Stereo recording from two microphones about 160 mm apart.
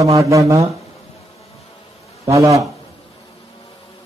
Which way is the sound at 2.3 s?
20° right (ahead or behind).